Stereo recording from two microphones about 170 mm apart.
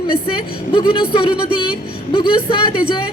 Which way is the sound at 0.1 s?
30° left (ahead or behind).